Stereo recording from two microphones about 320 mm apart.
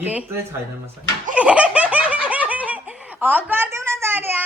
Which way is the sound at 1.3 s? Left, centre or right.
Centre.